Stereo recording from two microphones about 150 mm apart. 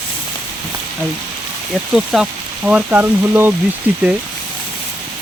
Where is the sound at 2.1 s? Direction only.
Centre (ahead or behind).